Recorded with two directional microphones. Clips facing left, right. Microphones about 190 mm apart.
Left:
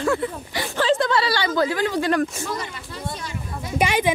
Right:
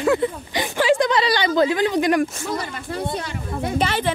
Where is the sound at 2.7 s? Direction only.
55° right (ahead or behind).